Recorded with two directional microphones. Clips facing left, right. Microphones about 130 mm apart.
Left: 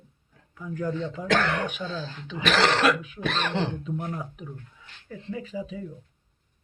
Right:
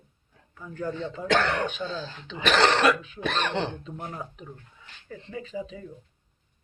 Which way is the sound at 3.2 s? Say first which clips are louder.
Even; centre (ahead or behind).